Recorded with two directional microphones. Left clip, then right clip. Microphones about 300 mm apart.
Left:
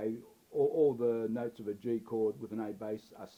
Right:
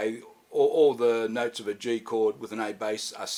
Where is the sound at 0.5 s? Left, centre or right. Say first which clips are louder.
Right 8 dB; right.